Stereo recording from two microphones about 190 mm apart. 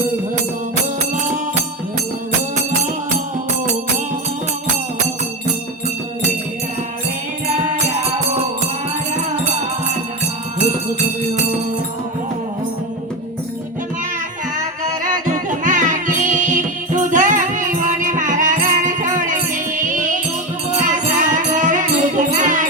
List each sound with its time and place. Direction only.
9.1 s music: 35° right (ahead or behind)
15.3 s music: 40° right (ahead or behind)